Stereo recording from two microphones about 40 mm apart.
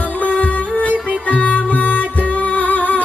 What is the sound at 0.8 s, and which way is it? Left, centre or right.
Music, right.